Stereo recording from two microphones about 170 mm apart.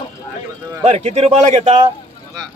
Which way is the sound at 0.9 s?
40° right (ahead or behind).